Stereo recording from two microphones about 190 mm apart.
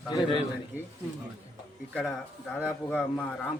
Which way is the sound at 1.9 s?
5° left (ahead or behind).